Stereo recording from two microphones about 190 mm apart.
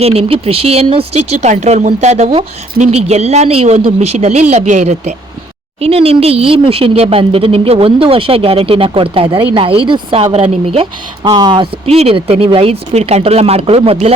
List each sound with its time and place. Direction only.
0.0 s speech: 30° right (ahead or behind)